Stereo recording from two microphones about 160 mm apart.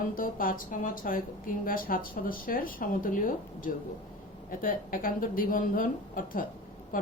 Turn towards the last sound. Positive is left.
turn(degrees=60)  # may be behind; listen again after turning